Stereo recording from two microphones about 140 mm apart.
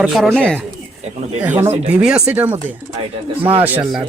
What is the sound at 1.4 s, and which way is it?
Speech, 10° right (ahead or behind).